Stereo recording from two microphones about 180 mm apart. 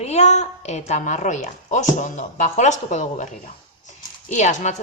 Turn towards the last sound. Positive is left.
turn(degrees=40)  # may be behind; listen again after turning